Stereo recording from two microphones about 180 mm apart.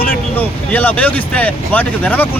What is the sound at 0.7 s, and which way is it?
Speech, 10° left (ahead or behind).